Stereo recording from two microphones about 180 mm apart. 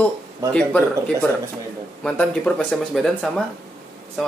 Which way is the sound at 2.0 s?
5° left (ahead or behind).